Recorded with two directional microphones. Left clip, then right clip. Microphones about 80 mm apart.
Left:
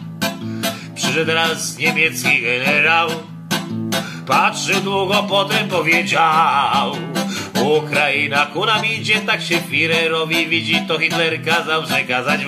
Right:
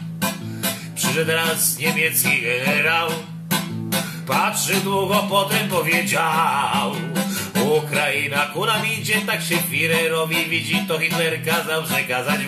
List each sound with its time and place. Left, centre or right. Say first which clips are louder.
1.0 s music: left 3 dB; left